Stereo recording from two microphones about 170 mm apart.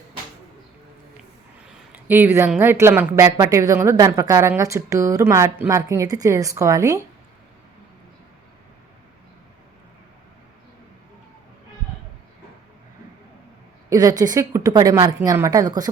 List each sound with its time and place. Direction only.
1.9 s a sound: 10° right (ahead or behind)
2.6 s speech: 15° right (ahead or behind)
13.9 s a woman's voice: 20° right (ahead or behind)